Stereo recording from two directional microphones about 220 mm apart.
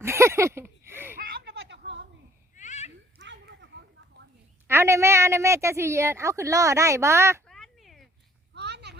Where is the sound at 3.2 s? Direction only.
55° right (ahead or behind).